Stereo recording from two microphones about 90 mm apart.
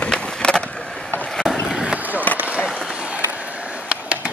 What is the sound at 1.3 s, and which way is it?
Skateboard, 5° right (ahead or behind).